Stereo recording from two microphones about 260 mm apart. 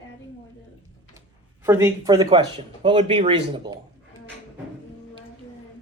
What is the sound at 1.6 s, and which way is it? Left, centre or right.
Speech, centre.